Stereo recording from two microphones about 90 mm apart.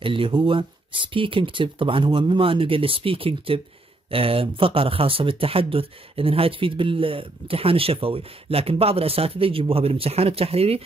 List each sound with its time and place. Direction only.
0.0 s speech: 75° right (ahead or behind); by 10.8 s 90° right